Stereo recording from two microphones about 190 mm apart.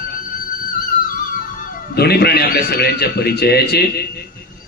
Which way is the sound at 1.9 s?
55° left (ahead or behind).